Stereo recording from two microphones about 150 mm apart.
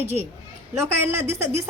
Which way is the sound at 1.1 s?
15° right (ahead or behind).